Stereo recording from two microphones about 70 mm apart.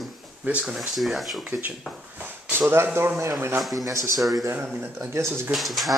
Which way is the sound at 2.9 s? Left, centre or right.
Right.